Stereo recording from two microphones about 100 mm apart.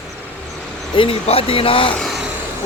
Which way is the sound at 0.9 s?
65° left (ahead or behind).